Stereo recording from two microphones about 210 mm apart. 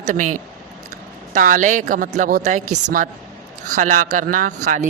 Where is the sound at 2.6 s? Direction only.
90° right.